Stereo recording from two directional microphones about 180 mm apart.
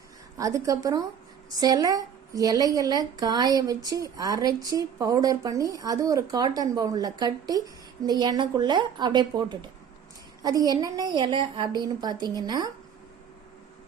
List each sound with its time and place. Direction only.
0.3 s a woman's voice: 20° right (ahead or behind)